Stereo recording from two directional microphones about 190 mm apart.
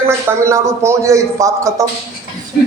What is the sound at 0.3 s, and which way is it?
A man's voice, 15° right (ahead or behind).